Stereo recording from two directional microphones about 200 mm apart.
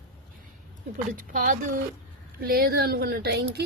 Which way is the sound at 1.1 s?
40° right (ahead or behind).